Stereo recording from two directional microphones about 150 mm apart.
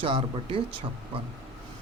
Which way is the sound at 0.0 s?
35° right (ahead or behind).